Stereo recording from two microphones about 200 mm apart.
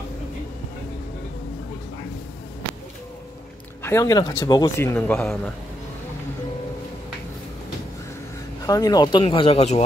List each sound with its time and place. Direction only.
3.8 s speech: 15° left (ahead or behind)
8.6 s speech: 20° left (ahead or behind)